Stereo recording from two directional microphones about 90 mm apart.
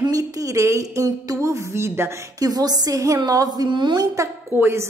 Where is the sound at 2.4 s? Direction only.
45° right (ahead or behind).